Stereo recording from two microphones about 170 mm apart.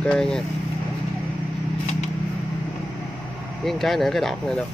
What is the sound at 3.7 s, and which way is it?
Speech, centre (ahead or behind).